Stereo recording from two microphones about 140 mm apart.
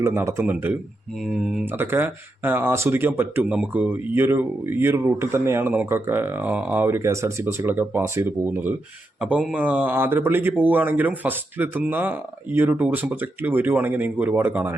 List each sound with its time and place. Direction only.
0.0 s speech: 15° right (ahead or behind); by 1.6 s centre (ahead or behind)
1.6 s speech: 15° right (ahead or behind)